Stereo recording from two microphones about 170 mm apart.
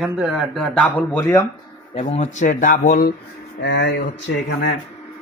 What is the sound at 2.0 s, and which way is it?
Speech, 45° left (ahead or behind).